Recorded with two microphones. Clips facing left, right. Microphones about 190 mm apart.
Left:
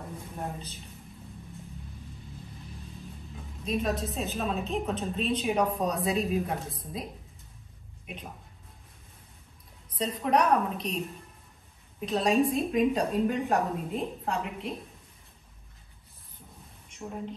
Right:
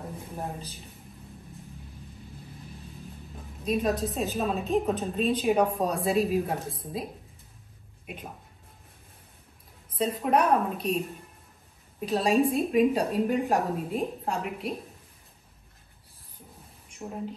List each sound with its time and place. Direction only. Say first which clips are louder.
3.6 s a woman's voice: right 3 dB; centre (ahead or behind)
9.9 s a woman's voice: right 1 dB; 5° right (ahead or behind)
12.1 s a woman's voice: right 1 dB; 5° right (ahead or behind)
17.0 s speech: right 1 dB; 20° right (ahead or behind)